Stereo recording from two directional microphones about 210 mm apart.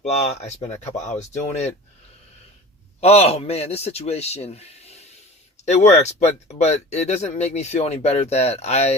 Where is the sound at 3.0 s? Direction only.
30° left (ahead or behind).